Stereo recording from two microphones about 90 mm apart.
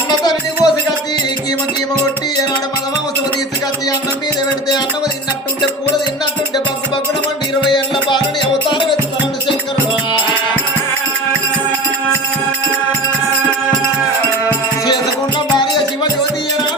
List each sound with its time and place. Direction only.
0.3 s music: 45° left (ahead or behind)
7.6 s music: 60° left (ahead or behind)